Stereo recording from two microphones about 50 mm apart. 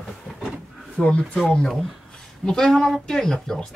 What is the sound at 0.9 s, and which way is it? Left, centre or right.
Speech, centre.